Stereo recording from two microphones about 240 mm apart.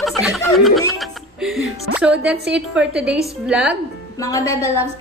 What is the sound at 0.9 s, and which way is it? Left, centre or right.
A woman's voice, centre.